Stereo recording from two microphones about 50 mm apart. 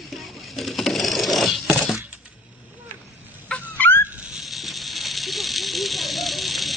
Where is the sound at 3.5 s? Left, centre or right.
Centre.